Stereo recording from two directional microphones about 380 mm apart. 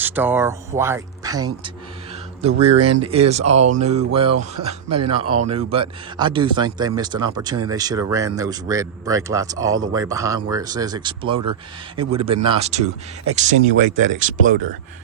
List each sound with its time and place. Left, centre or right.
0.0 s speech: centre
5.2 s speech: right
5.5 s speech: centre
14.0 s speech: centre